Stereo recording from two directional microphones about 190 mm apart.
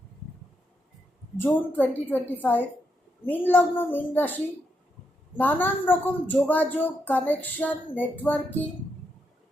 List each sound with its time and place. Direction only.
1.4 s a woman's voice: 10° left (ahead or behind)